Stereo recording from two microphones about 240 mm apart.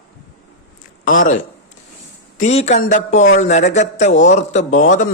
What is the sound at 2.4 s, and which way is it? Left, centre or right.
A man's voice, left.